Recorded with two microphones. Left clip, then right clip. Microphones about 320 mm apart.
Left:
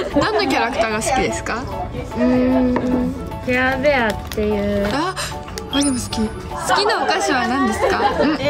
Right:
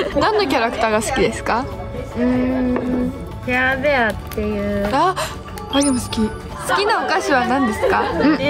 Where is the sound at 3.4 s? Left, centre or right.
Centre.